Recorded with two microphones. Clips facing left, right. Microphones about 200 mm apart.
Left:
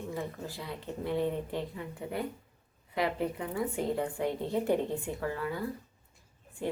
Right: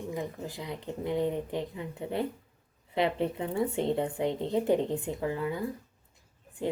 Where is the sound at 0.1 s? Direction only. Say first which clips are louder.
Right 2 dB; 15° right (ahead or behind).